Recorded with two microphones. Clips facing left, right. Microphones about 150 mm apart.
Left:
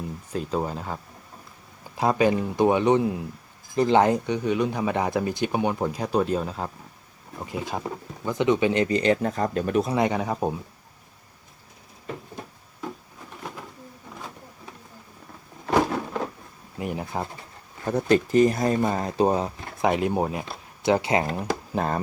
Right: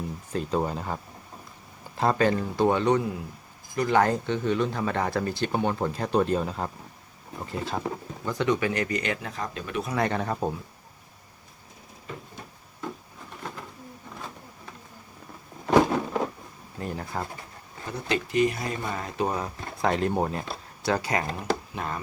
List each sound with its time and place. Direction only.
0.3 s speech: centre (ahead or behind)
2.0 s speech: 10° left (ahead or behind); by 9.3 s 30° left (ahead or behind)
9.3 s speech: 45° left (ahead or behind)
9.9 s speech: 15° left (ahead or behind)
15.9 s a sound: 15° right (ahead or behind)
16.7 s speech: 15° left (ahead or behind)
17.8 s speech: 50° left (ahead or behind); by 19.5 s 30° left (ahead or behind)
19.8 s speech: 15° left (ahead or behind)
20.8 s speech: 20° left (ahead or behind)
21.7 s speech: 40° left (ahead or behind)